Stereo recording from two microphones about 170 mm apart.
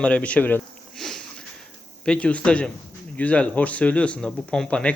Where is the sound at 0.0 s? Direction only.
5° left (ahead or behind).